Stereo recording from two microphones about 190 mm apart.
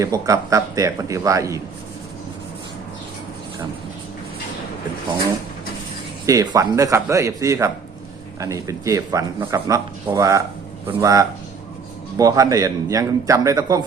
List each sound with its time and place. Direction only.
0.0 s speech: 15° right (ahead or behind)
6.2 s a man's voice: 20° right (ahead or behind)